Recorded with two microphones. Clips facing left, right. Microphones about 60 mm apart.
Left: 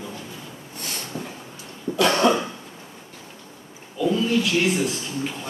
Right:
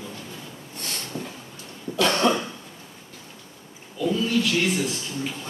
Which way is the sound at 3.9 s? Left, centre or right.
Centre.